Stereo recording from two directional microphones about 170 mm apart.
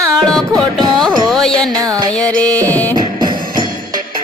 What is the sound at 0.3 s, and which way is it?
Music, 5° left (ahead or behind).